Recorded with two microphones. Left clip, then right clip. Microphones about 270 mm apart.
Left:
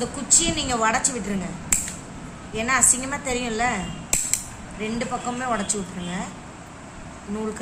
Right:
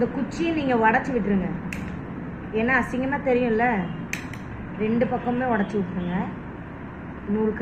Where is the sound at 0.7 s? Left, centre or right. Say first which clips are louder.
Right 3 dB; left.